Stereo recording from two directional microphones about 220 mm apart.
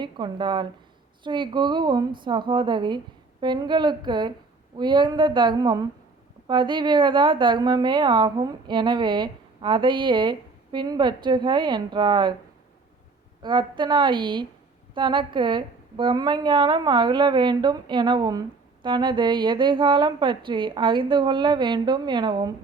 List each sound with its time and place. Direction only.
0.0 s a woman's voice: 20° right (ahead or behind)
13.4 s a woman's voice: 20° right (ahead or behind)